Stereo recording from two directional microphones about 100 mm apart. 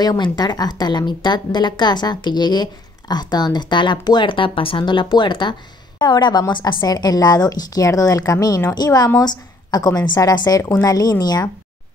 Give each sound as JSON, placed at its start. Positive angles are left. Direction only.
{"t": 0.0, "sound": "a woman's voice", "side_deg": 45}